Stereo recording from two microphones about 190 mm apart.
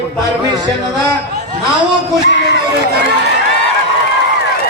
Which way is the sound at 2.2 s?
65° left (ahead or behind).